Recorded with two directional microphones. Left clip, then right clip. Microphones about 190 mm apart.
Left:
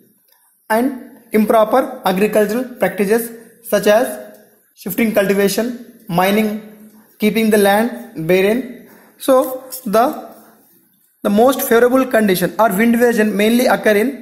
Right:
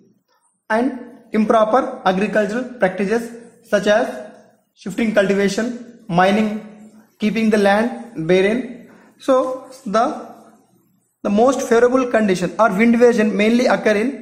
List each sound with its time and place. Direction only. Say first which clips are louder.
1.3 s speech: left 2 dB; 15° left (ahead or behind)
9.8 s speech: left 3 dB; 25° left (ahead or behind)
11.2 s speech: left 2 dB; 15° left (ahead or behind)
12.7 s a man's voice: even; centre (ahead or behind)